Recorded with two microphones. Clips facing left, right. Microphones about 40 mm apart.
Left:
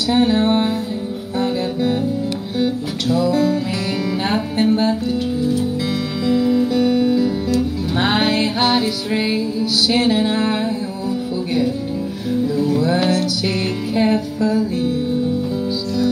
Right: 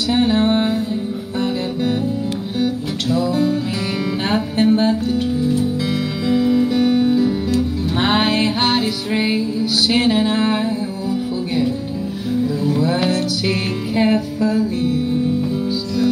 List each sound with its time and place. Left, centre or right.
0.1 s music: centre
3.1 s music: centre
6.2 s music: centre
12.7 s music: centre